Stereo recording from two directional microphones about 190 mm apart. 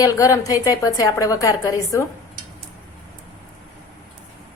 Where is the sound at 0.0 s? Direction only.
15° left (ahead or behind).